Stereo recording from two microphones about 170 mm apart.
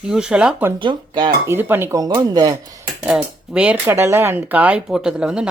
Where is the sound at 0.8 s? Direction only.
25° right (ahead or behind).